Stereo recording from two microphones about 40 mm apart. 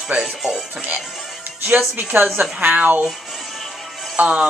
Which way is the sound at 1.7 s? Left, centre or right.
Right.